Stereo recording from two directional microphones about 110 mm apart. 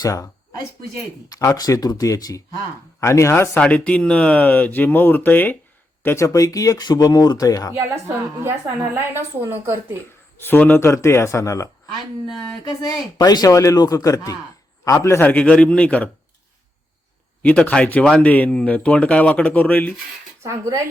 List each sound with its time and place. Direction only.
0.0 s speech: 35° left (ahead or behind)
1.3 s speech: 30° left (ahead or behind)
3.6 s speech: 10° left (ahead or behind); by 7.7 s 35° left (ahead or behind)
7.8 s a woman's voice: 20° right (ahead or behind)
10.3 s speech: 20° left (ahead or behind)
12.8 s speech: 35° left (ahead or behind); by 16.0 s 10° left (ahead or behind)
17.4 s speech: 10° left (ahead or behind)
20.4 s a woman's voice: 25° right (ahead or behind)